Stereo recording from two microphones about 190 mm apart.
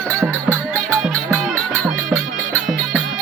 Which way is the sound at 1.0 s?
Centre (ahead or behind).